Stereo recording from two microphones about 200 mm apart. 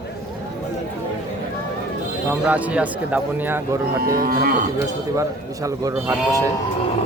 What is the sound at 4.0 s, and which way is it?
Cattle, 45° right (ahead or behind).